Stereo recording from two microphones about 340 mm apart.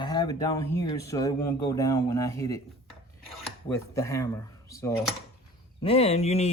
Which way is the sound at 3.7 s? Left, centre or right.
Centre.